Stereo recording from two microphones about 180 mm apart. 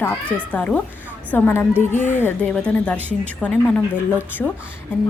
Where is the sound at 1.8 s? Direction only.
45° left (ahead or behind).